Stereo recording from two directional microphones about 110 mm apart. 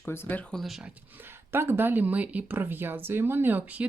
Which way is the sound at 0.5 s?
Centre (ahead or behind).